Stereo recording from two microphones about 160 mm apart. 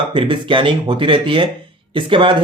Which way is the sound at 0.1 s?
30° right (ahead or behind).